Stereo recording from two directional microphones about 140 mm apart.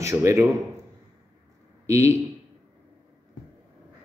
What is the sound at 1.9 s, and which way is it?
Speech, 20° right (ahead or behind).